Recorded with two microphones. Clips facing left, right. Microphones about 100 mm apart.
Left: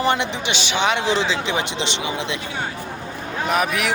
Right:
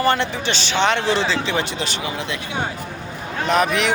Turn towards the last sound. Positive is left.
turn(degrees=5)  # may be behind; listen again after turning